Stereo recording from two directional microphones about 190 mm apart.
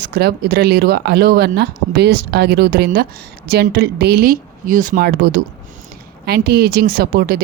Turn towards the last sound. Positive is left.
turn(degrees=-50)  # may be behind; listen again after turning